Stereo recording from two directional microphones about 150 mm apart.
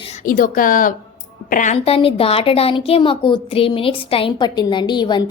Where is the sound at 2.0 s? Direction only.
40° left (ahead or behind).